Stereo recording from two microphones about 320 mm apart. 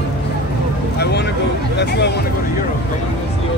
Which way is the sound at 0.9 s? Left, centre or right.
Left.